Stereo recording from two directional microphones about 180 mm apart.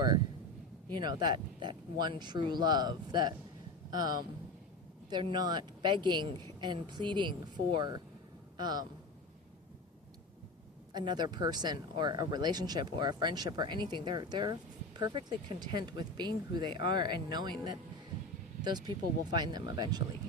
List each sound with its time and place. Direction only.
0.9 s speech: 25° right (ahead or behind)
5.0 s a man's voice: 25° right (ahead or behind)
10.9 s speech: 25° right (ahead or behind)